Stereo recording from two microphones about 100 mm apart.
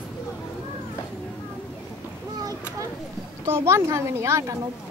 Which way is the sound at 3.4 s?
25° right (ahead or behind).